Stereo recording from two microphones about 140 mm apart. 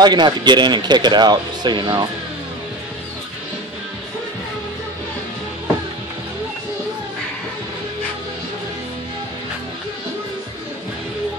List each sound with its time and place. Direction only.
0.0 s speech: 30° right (ahead or behind)